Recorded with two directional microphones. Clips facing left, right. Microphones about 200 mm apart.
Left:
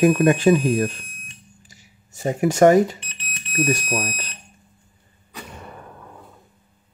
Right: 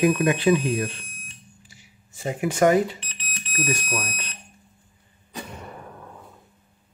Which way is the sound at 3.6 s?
35° left (ahead or behind).